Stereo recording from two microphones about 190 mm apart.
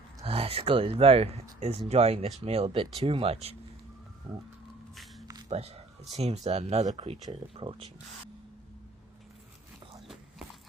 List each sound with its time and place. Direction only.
0.2 s speech: 30° right (ahead or behind)
4.3 s a sound: 25° right (ahead or behind)
5.5 s speech: 35° right (ahead or behind)